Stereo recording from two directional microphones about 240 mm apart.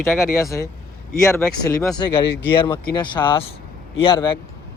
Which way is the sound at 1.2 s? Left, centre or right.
Centre.